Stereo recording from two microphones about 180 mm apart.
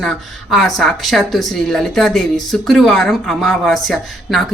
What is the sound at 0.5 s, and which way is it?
Speech, centre (ahead or behind).